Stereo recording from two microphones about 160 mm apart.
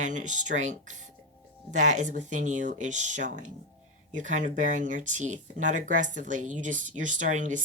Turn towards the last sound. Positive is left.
turn(degrees=-50)  # may be behind; listen again after turning